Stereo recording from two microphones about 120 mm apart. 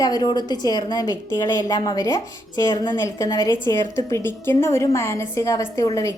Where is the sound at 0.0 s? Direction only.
35° left (ahead or behind).